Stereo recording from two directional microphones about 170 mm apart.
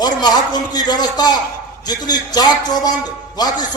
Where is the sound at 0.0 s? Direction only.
25° left (ahead or behind).